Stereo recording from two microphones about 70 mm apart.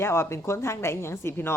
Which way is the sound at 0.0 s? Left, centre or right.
Left.